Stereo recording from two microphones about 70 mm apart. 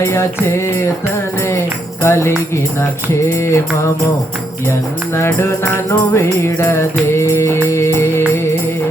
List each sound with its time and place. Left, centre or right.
0.0 s music: left
2.0 s music: left
5.1 s music: left